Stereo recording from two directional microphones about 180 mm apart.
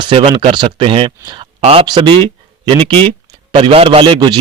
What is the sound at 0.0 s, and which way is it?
Speech, 25° right (ahead or behind).